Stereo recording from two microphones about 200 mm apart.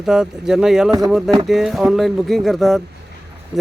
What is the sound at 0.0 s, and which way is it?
Speech, centre (ahead or behind).